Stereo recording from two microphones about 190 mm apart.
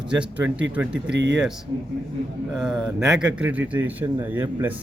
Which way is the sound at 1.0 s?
65° right (ahead or behind).